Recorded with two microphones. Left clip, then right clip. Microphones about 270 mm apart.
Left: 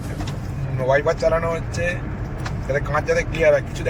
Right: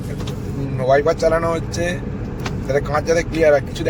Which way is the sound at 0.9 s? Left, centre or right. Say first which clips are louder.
Right 3 dB; centre.